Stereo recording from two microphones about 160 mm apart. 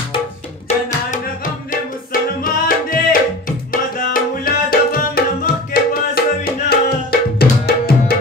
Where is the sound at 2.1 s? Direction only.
60° left (ahead or behind).